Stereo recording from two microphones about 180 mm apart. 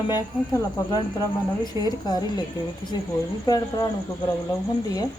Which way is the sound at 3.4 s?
20° left (ahead or behind).